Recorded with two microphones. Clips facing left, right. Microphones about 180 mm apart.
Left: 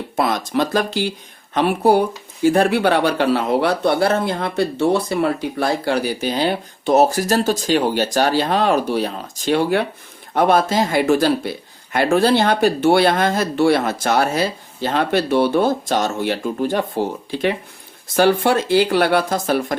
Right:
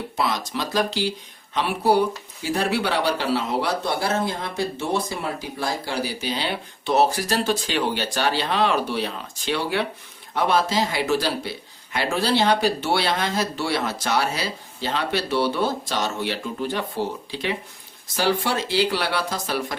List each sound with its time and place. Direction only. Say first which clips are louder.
0.2 s speech: left 7 dB; 50° left (ahead or behind)